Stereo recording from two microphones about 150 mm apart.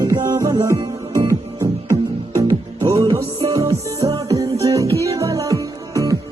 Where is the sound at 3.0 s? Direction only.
30° right (ahead or behind).